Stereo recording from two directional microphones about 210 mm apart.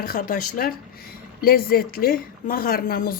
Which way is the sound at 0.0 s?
40° left (ahead or behind).